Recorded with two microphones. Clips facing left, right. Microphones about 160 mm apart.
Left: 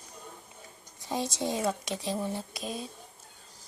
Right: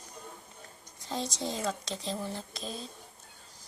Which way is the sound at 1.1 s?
15° left (ahead or behind).